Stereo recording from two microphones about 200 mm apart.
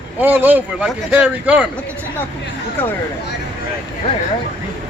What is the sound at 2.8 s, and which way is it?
Speech, 10° left (ahead or behind).